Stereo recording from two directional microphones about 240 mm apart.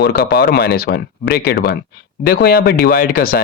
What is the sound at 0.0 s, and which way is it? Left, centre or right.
Speech, left.